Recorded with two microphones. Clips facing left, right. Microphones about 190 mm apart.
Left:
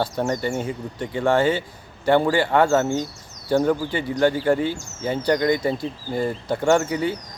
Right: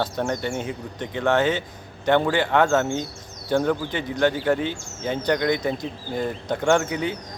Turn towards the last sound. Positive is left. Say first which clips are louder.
# left 2 dB
turn(degrees=5)  # may be behind; listen again after turning